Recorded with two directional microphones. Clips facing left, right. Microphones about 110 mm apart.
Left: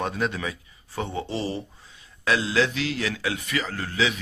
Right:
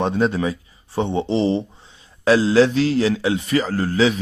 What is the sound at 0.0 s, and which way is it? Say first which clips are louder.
Speech: right 8 dB; 30° right (ahead or behind).